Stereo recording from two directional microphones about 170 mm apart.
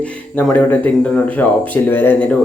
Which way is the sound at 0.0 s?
10° left (ahead or behind).